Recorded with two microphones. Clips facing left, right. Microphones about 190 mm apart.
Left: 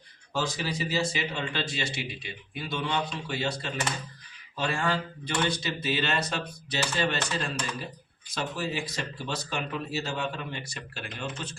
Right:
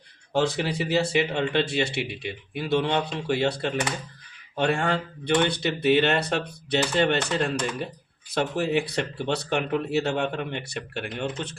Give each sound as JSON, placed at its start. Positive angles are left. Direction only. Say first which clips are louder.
{"t": 0.3, "sound": "speech", "louder": "right 6 dB", "side_deg": -65}